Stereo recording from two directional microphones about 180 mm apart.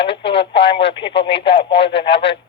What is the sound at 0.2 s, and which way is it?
Radio, 75° left (ahead or behind).